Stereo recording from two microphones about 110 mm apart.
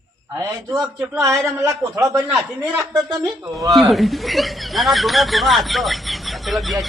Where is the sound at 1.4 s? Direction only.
30° right (ahead or behind).